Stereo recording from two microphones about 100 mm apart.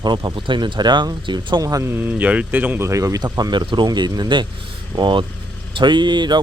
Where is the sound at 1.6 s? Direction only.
30° right (ahead or behind).